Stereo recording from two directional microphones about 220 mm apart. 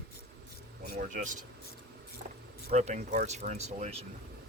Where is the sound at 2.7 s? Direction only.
30° right (ahead or behind).